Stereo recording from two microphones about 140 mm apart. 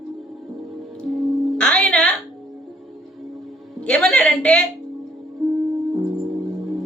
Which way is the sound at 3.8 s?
5° left (ahead or behind).